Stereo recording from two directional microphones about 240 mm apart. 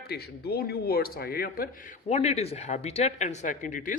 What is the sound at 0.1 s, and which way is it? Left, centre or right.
A man's voice, left.